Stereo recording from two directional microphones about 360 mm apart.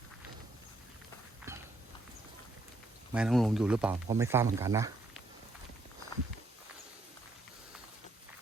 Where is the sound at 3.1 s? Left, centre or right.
Centre.